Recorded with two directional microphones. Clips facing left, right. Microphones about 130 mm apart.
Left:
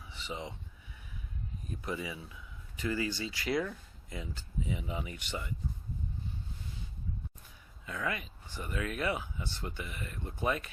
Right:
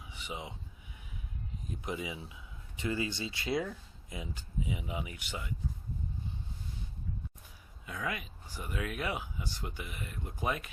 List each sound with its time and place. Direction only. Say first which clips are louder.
0.0 s a sound: left 2 dB; 15° right (ahead or behind)
1.8 s speech: even; 20° right (ahead or behind)
7.9 s speech: left 1 dB; 10° right (ahead or behind)